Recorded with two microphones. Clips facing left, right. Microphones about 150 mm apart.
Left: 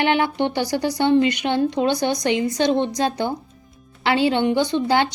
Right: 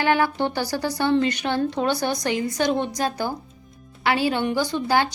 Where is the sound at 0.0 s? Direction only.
20° left (ahead or behind).